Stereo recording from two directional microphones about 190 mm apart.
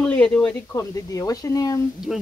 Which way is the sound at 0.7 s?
15° left (ahead or behind).